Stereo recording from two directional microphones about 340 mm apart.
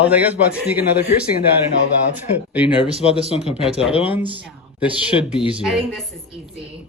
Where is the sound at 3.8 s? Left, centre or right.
Centre.